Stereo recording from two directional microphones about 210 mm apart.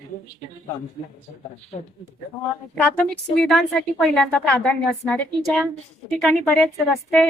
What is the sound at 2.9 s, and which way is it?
A woman's voice, 5° left (ahead or behind).